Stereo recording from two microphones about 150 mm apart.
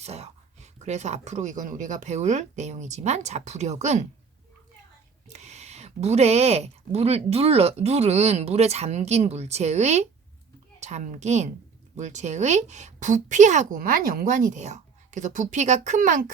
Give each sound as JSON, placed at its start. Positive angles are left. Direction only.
{"t": 0.0, "sound": "speech", "side_deg": -45}
{"t": 5.3, "sound": "speech", "side_deg": -50}
{"t": 13.8, "sound": "a woman's voice", "side_deg": -70}